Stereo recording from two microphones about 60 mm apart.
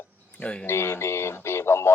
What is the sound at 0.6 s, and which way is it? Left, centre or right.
Speech, left.